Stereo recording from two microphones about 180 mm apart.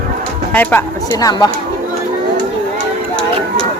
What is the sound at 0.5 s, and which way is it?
Speech, 10° left (ahead or behind).